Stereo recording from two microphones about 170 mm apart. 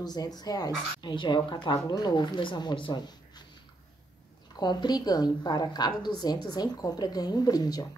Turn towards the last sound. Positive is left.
turn(degrees=20)  # may be behind; listen again after turning